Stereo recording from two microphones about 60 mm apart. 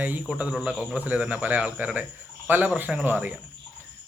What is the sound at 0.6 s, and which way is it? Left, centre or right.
A man's voice, centre.